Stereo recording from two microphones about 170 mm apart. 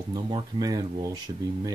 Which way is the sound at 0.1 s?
25° right (ahead or behind).